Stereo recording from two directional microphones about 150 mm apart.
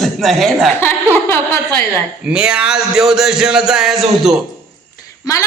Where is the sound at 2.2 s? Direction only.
5° right (ahead or behind).